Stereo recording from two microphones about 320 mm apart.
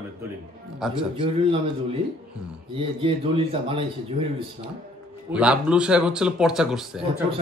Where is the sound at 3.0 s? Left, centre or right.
Centre.